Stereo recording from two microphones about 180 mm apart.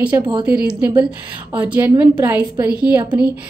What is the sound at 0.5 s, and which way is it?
Speech, 5° right (ahead or behind).